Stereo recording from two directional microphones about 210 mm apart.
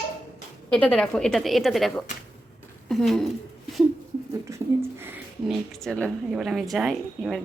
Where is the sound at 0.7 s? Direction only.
5° left (ahead or behind).